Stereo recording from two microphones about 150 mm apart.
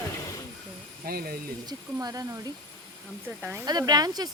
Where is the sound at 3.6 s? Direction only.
25° right (ahead or behind).